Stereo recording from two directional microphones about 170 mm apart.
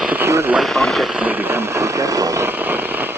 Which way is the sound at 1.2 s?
15° right (ahead or behind).